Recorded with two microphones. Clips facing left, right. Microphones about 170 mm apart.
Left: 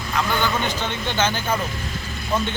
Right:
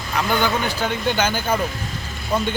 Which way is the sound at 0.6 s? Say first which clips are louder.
Right 3 dB; 10° right (ahead or behind).